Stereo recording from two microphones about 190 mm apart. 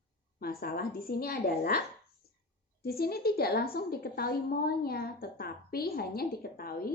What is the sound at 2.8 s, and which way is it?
A woman's voice, 55° left (ahead or behind).